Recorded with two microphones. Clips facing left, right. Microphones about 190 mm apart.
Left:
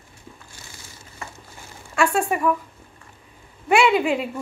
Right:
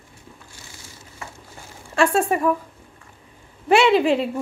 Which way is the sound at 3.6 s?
30° right (ahead or behind).